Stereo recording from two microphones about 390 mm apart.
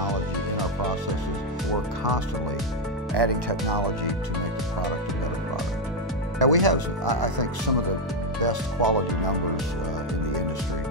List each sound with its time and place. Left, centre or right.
3.2 s speech: right
6.4 s speech: right